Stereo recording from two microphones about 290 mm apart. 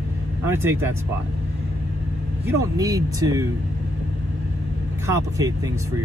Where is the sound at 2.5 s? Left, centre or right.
Centre.